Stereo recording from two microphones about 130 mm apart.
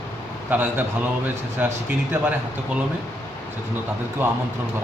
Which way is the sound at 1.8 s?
15° right (ahead or behind).